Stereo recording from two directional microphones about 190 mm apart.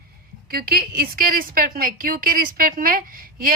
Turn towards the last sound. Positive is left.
turn(degrees=-50)  # may be behind; listen again after turning